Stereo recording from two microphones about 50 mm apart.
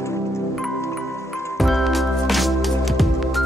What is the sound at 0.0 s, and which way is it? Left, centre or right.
Music, left.